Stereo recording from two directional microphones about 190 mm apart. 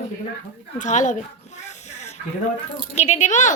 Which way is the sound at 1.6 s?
35° left (ahead or behind).